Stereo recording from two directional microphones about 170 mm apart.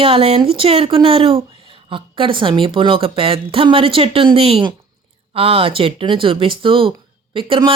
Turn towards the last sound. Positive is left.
turn(degrees=-30)  # may be behind; listen again after turning